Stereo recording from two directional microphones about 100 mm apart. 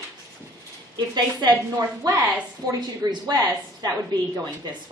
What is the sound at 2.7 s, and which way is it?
A woman's voice, 40° right (ahead or behind).